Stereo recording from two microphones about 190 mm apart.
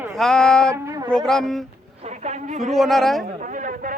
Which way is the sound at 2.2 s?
40° right (ahead or behind).